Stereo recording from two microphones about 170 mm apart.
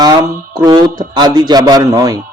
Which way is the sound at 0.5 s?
25° right (ahead or behind).